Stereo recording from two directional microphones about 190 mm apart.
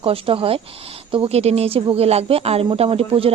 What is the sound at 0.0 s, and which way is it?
Speech, 30° right (ahead or behind).